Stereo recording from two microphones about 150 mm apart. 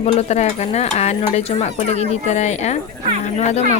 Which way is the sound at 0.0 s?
40° left (ahead or behind).